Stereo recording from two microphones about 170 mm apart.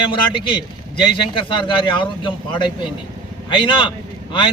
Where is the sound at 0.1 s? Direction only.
30° left (ahead or behind).